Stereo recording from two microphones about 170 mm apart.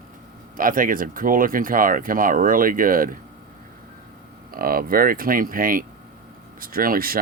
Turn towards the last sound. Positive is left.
turn(degrees=-60)  # may be behind; listen again after turning